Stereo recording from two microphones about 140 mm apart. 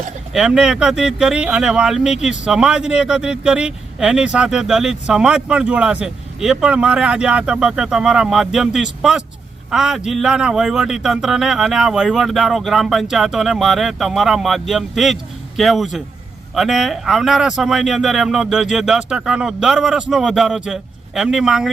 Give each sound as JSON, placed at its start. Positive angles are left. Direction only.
{"t": 0.3, "sound": "speech", "side_deg": -5}